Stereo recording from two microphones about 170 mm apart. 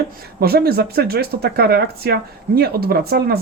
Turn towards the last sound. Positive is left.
turn(degrees=-65)  # may be behind; listen again after turning